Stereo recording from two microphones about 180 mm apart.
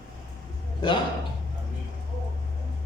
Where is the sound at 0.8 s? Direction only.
25° left (ahead or behind).